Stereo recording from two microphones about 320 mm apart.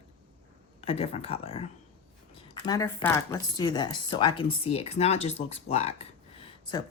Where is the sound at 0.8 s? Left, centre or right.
Centre.